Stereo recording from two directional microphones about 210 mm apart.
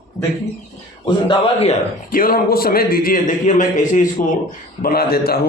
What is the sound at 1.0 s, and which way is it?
Speech, 20° left (ahead or behind).